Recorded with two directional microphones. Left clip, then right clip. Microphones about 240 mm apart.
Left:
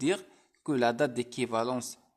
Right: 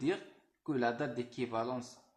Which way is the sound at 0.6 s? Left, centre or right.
Left.